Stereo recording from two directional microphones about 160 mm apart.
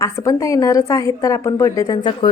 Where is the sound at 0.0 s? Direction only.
20° left (ahead or behind).